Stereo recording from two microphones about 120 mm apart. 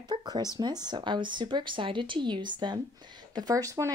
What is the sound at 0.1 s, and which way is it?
Speech, 35° right (ahead or behind).